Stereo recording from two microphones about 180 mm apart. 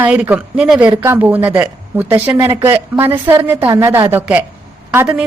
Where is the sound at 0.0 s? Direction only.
10° right (ahead or behind).